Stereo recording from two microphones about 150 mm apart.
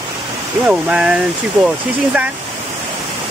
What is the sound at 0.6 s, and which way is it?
Speech, 10° right (ahead or behind).